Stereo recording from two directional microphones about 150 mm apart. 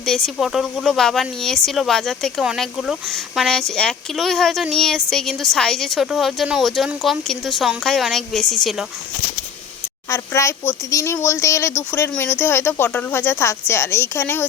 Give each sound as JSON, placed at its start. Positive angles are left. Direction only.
{"t": 0.0, "sound": "speech", "side_deg": 0}
{"t": 10.1, "sound": "speech", "side_deg": 20}